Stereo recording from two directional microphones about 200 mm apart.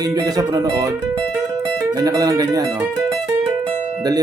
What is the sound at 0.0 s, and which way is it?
Speech, 20° right (ahead or behind).